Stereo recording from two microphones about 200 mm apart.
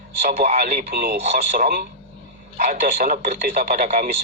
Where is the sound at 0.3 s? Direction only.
40° right (ahead or behind).